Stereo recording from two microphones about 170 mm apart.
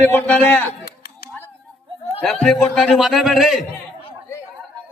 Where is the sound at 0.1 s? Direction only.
5° left (ahead or behind).